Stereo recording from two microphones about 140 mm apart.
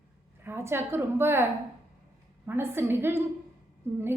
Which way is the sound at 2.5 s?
15° right (ahead or behind).